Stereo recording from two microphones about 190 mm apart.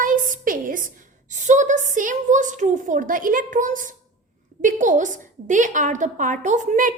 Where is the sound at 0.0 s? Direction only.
45° right (ahead or behind).